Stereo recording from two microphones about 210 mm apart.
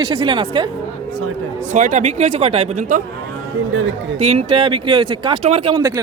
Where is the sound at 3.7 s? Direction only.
65° right (ahead or behind).